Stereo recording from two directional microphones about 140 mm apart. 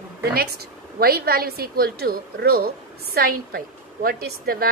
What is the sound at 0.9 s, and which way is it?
A woman's voice, 90° right.